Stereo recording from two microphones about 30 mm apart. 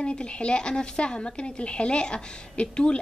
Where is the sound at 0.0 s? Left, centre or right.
Left.